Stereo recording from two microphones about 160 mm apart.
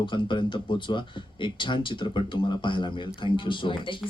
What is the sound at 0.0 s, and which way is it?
Speech, 30° left (ahead or behind).